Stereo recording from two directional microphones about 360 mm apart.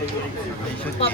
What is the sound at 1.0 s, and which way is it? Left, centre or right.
Speech, centre.